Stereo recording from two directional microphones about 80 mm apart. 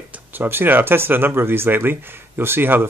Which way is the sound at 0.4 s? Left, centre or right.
Right.